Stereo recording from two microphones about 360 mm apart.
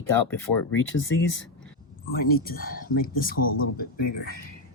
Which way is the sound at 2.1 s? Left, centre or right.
Left.